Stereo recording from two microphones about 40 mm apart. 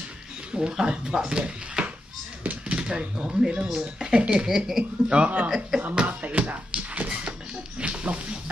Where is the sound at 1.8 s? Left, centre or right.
Right.